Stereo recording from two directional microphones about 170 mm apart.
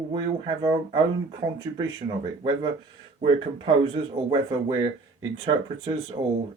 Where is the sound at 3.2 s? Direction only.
35° right (ahead or behind).